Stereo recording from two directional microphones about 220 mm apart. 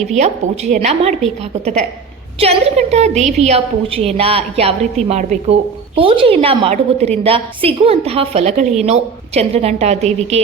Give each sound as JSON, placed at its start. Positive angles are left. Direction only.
{"t": 0.2, "sound": "a woman's voice", "side_deg": -30}
{"t": 2.4, "sound": "a woman's voice", "side_deg": -30}